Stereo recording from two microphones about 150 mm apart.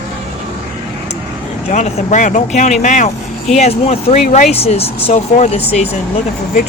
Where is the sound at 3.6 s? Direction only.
45° left (ahead or behind).